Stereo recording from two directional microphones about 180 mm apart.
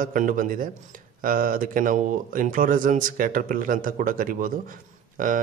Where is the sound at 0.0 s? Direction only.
50° right (ahead or behind).